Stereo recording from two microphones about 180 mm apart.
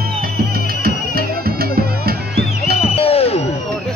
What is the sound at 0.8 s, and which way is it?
Music, 55° right (ahead or behind).